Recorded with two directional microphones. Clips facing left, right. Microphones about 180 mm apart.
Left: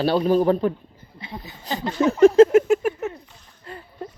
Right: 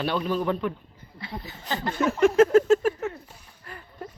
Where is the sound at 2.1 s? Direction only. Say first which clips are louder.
Left 6 dB; 35° left (ahead or behind).